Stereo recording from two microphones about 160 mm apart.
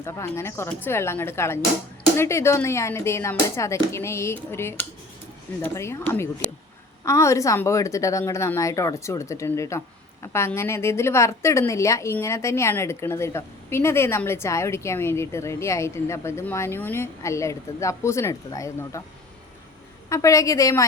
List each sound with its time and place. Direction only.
0.0 s a woman's voice: 15° left (ahead or behind)
20.1 s a woman's voice: 20° left (ahead or behind)